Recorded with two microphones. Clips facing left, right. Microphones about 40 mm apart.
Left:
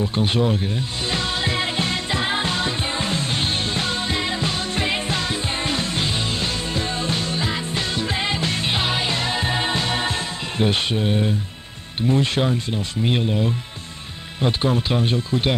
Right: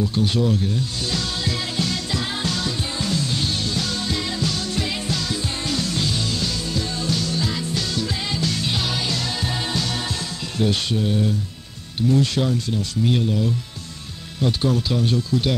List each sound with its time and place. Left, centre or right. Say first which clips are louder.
0.0 s speech: even; left
1.1 s music: left 4 dB; left
10.6 s speech: left 1 dB; left